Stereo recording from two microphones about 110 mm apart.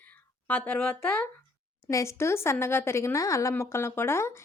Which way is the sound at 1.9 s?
25° left (ahead or behind).